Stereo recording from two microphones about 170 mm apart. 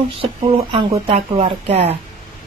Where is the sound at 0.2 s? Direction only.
30° right (ahead or behind).